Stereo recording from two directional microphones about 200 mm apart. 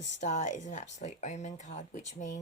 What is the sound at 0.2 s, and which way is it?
Speech, 35° left (ahead or behind).